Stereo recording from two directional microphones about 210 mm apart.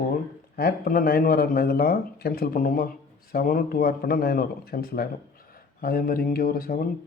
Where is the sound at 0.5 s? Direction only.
45° left (ahead or behind).